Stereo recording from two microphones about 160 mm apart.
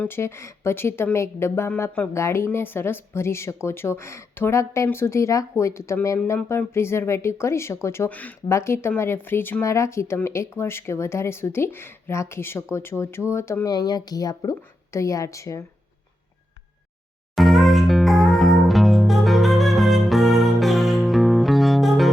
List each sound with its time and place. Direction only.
0.0 s a woman's voice: 15° left (ahead or behind)
17.3 s music: centre (ahead or behind)